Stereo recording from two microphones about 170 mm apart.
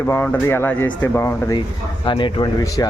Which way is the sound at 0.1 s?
15° left (ahead or behind).